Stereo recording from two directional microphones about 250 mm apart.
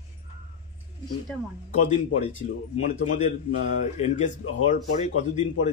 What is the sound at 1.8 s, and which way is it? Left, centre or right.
A man's voice, left.